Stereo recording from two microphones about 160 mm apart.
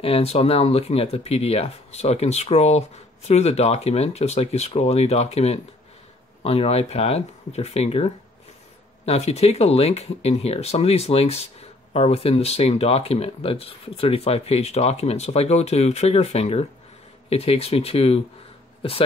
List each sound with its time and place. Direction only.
0.0 s speech: 40° left (ahead or behind)